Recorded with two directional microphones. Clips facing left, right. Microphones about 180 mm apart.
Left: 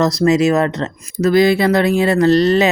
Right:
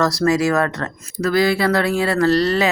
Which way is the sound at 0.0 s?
20° left (ahead or behind).